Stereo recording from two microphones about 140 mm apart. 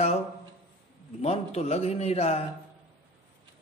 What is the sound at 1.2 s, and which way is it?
A man's voice, 50° left (ahead or behind).